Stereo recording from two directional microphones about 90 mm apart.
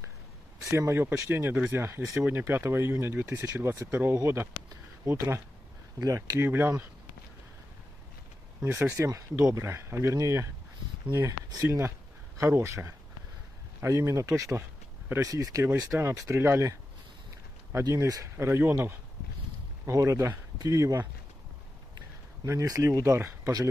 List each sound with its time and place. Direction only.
0.6 s speech: 30° right (ahead or behind)
8.6 s speech: 25° right (ahead or behind); by 11.6 s 40° right (ahead or behind)
11.6 s speech: 30° right (ahead or behind)
13.9 s speech: 35° right (ahead or behind)
17.7 s speech: 35° right (ahead or behind)
22.4 s speech: 35° right (ahead or behind)